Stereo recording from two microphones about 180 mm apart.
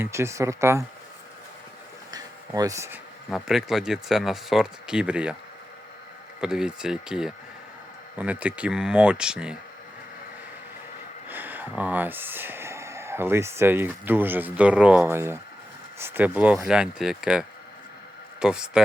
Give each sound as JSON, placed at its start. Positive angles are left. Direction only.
{"t": 0.0, "sound": "speech", "side_deg": -15}
{"t": 2.0, "sound": "a sound", "side_deg": -20}
{"t": 3.2, "sound": "speech", "side_deg": 0}
{"t": 6.4, "sound": "speech", "side_deg": -5}
{"t": 11.3, "sound": "speech", "side_deg": -10}